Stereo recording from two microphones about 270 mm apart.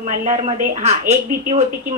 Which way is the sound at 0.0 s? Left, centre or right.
Right.